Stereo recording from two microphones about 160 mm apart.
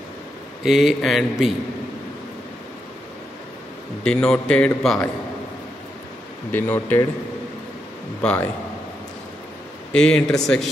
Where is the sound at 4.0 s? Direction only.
5° left (ahead or behind).